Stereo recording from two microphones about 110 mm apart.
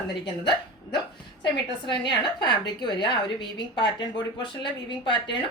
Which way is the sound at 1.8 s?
45° left (ahead or behind).